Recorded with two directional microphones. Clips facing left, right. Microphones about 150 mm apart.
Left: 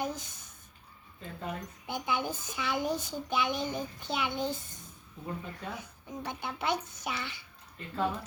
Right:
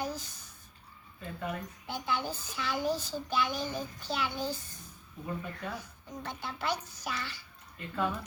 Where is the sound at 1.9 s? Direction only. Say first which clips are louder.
Left 1 dB; 15° left (ahead or behind).